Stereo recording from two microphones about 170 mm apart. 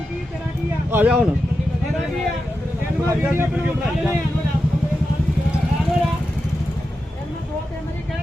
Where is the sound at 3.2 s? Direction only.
10° right (ahead or behind).